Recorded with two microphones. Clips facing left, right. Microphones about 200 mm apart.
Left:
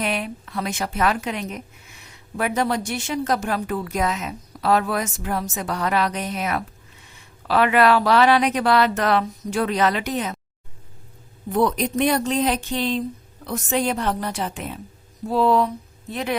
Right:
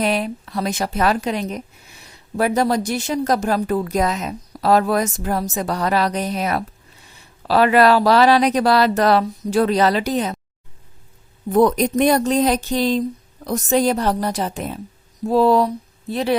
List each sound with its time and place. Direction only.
0.0 s a woman's voice: 35° right (ahead or behind)
11.5 s a woman's voice: 45° right (ahead or behind)